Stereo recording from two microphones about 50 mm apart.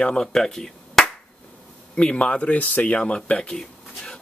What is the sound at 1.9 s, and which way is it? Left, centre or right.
Speech, left.